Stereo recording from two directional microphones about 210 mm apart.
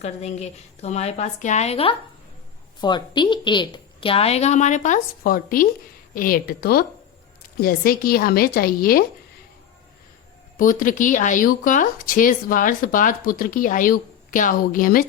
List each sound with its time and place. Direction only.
0.0 s a woman's voice: 30° left (ahead or behind)
10.6 s speech: 40° left (ahead or behind)